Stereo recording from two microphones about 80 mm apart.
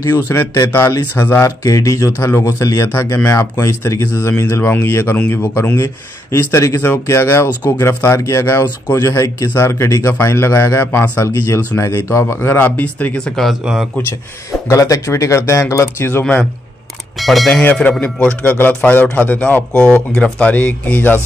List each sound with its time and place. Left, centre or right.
0.3 s a man's voice: left; by 13.5 s centre
14.7 s a man's voice: left
17.2 s speech: centre
17.6 s a man's voice: left